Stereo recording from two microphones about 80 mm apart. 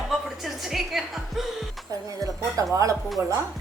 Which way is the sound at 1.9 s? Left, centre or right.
Right.